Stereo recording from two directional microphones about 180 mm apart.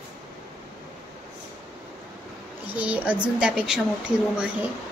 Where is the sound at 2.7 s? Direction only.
5° right (ahead or behind).